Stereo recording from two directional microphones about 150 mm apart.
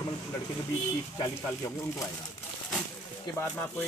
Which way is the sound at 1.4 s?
20° left (ahead or behind).